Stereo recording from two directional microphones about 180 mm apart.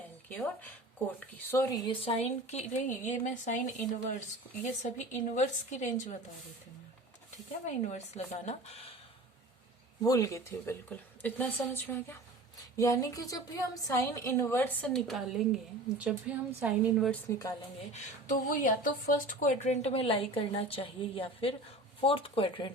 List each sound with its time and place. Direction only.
0.3 s a woman's voice: 10° left (ahead or behind)
1.9 s a woman's voice: 30° left (ahead or behind)
7.6 s speech: 40° left (ahead or behind)
10.0 s a woman's voice: 20° left (ahead or behind); by 17.1 s 10° right (ahead or behind)
17.1 s a woman's voice: 15° left (ahead or behind)
17.9 s speech: 45° left (ahead or behind); by 22.7 s 30° left (ahead or behind)